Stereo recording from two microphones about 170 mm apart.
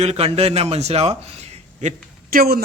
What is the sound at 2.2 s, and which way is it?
Speech, 60° right (ahead or behind).